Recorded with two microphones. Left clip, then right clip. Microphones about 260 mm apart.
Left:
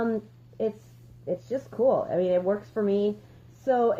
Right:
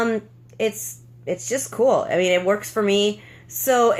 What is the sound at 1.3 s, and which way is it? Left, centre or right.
Speech, centre.